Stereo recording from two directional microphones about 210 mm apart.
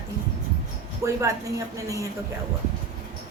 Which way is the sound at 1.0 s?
15° right (ahead or behind).